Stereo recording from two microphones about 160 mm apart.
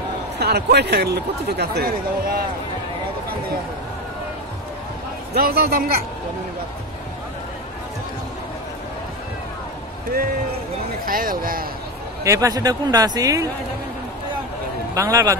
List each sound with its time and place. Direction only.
0.4 s speech: 90° right; by 2.3 s 70° right (ahead or behind)
5.3 s a man's voice: 75° right (ahead or behind)
11.1 s speech: 60° right (ahead or behind)
12.2 s speech: 20° right (ahead or behind)
15.0 s speech: 20° right (ahead or behind)